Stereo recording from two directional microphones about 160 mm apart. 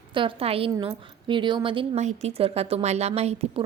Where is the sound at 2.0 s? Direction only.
45° right (ahead or behind).